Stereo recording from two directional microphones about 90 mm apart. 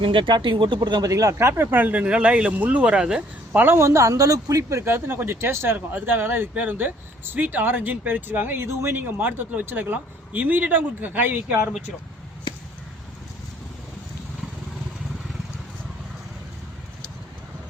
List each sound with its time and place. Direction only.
0.0 s speech: 75° right (ahead or behind); by 1.6 s 30° right (ahead or behind)
1.7 s speech: 20° right (ahead or behind)
3.6 s speech: 30° right (ahead or behind)